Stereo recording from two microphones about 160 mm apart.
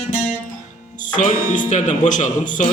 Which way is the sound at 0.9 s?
55° left (ahead or behind).